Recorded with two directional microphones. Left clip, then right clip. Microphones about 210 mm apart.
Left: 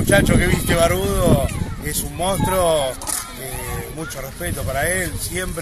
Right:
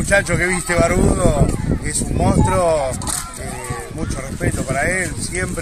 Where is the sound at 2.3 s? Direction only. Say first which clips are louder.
Right 1 dB; centre (ahead or behind).